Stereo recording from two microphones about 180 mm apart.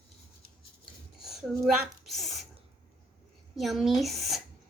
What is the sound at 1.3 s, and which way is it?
Speech, centre (ahead or behind).